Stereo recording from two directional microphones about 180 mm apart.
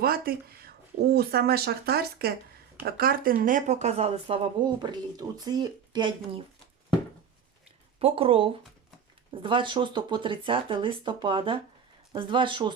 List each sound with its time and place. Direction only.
0.0 s a woman's voice: 55° right (ahead or behind); by 6.4 s 25° right (ahead or behind)
7.9 s a woman's voice: 30° right (ahead or behind)